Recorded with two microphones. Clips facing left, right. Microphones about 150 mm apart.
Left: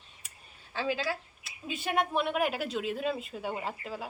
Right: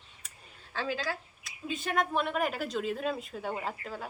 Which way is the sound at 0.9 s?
5° left (ahead or behind).